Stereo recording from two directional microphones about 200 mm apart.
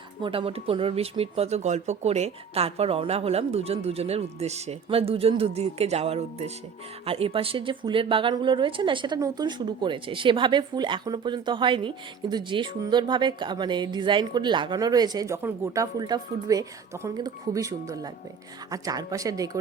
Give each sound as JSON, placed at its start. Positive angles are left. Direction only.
{"t": 0.2, "sound": "speech", "side_deg": -25}